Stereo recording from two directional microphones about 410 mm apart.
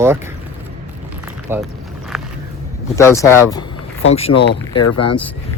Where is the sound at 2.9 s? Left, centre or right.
Centre.